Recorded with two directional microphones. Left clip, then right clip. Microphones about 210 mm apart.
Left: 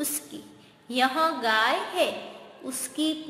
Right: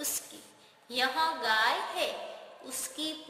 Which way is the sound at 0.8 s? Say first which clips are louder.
Left 5 dB; centre (ahead or behind).